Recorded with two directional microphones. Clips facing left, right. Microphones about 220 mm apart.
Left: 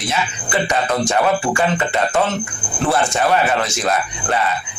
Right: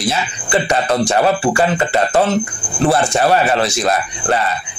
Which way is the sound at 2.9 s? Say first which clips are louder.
Right 2 dB; 35° right (ahead or behind).